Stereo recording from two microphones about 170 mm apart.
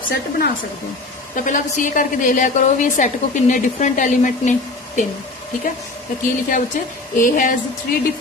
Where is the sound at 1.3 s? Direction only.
50° left (ahead or behind).